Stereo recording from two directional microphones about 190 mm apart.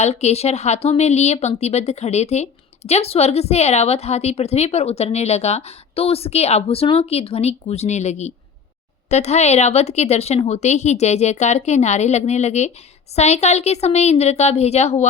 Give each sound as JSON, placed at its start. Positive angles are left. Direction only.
{"t": 0.0, "sound": "speech", "side_deg": 35}